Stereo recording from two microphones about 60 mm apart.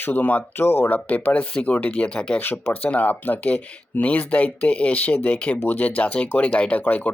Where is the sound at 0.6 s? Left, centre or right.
Left.